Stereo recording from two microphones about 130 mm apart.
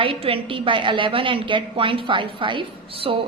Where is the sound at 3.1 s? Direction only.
45° right (ahead or behind).